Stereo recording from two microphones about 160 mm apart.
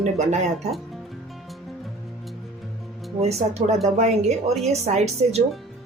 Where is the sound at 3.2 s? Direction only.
40° right (ahead or behind).